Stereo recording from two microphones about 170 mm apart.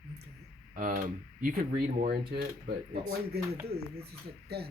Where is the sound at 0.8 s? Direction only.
50° right (ahead or behind).